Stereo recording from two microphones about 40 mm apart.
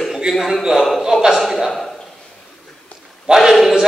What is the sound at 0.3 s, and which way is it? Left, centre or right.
Speech, centre.